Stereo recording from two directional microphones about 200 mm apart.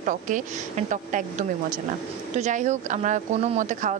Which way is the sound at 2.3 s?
35° right (ahead or behind).